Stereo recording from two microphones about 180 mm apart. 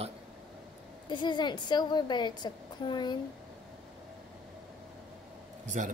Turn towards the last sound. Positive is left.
turn(degrees=-45)  # may be behind; listen again after turning